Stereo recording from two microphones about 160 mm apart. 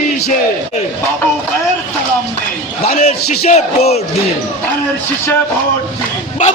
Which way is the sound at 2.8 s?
45° left (ahead or behind).